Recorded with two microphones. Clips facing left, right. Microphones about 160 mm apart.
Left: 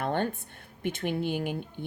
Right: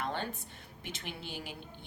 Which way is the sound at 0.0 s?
55° left (ahead or behind).